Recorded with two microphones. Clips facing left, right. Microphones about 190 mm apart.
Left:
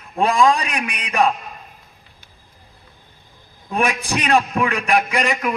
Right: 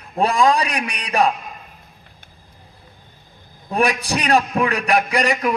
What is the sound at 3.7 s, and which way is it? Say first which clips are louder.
A man's voice: right 1 dB; 40° right (ahead or behind).